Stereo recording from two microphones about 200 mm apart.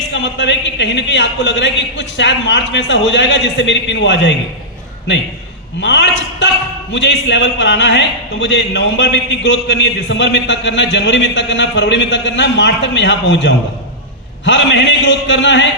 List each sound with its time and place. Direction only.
0.1 s a man's voice: 60° left (ahead or behind)
5.8 s a man's voice: 60° left (ahead or behind)